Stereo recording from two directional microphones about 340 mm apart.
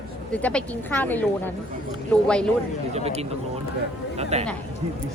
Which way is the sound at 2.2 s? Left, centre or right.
Centre.